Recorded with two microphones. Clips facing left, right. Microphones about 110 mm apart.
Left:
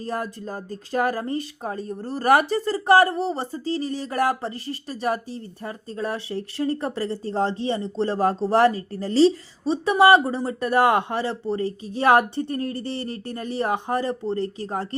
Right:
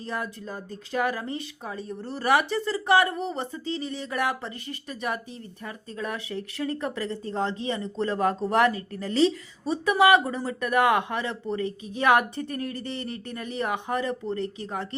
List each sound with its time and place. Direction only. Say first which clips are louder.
0.0 s speech: left 4 dB; 40° left (ahead or behind)